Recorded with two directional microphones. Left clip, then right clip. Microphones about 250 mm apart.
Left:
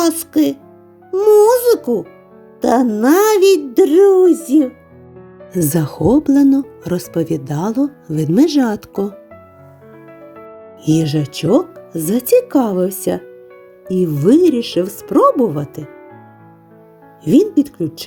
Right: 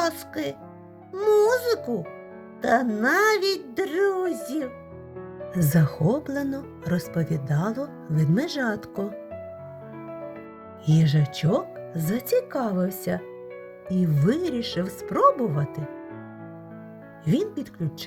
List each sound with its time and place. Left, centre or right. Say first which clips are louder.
0.0 s speech: left 12 dB; left
10.8 s speech: left 11 dB; left
17.2 s speech: left 14 dB; left